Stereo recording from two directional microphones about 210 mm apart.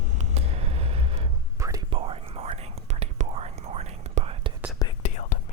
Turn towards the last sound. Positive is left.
turn(degrees=35)  # may be behind; listen again after turning